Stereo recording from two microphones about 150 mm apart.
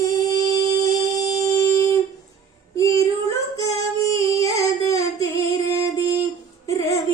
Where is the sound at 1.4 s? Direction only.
20° left (ahead or behind).